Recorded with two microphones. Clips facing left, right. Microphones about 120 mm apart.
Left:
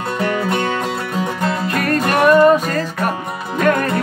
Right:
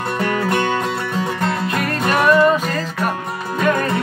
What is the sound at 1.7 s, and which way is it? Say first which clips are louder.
Music: left 2 dB; 45° left (ahead or behind).